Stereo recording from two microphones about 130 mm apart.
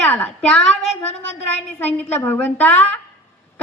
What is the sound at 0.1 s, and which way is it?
Speech, 10° left (ahead or behind).